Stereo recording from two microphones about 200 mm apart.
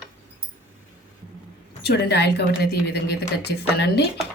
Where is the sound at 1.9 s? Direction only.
55° left (ahead or behind).